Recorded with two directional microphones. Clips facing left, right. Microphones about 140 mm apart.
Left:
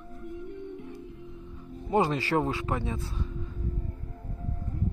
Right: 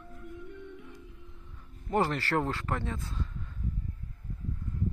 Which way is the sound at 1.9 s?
15° left (ahead or behind).